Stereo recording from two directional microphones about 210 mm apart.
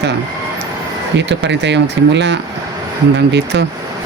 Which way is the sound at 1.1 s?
55° right (ahead or behind).